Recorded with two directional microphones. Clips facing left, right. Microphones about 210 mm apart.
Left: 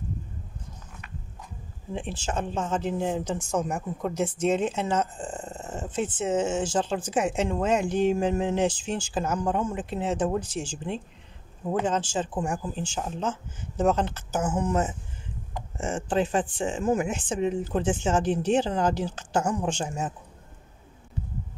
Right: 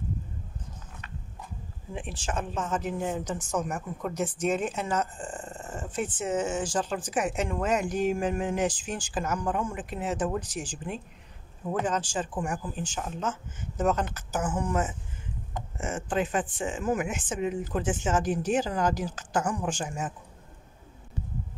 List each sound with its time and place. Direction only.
2.0 s speech: 25° left (ahead or behind)